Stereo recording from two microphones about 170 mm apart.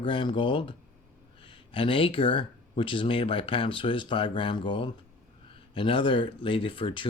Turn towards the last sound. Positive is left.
turn(degrees=30)  # may be behind; listen again after turning